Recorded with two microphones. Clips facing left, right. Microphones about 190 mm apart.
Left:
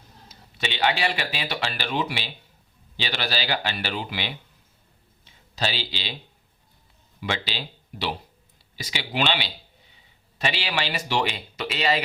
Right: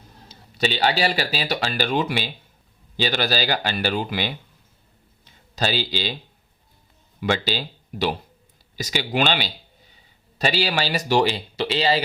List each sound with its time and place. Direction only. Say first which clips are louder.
0.3 s speech: right 8 dB; 35° right (ahead or behind)
5.2 s a sound: right 3 dB; 45° right (ahead or behind)
7.2 s speech: right 6 dB; 45° right (ahead or behind)